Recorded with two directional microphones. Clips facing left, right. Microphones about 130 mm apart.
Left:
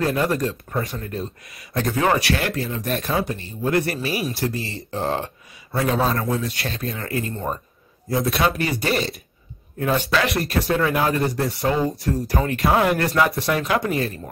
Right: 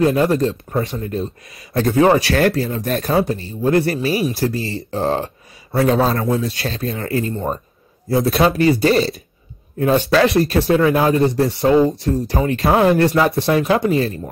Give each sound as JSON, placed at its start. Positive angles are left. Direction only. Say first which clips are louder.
{"t": 0.0, "sound": "speech", "louder": "right 6 dB", "side_deg": -25}
{"t": 2.3, "sound": "speech", "louder": "right 8 dB", "side_deg": -40}
{"t": 10.1, "sound": "speech", "louder": "right 7 dB", "side_deg": -30}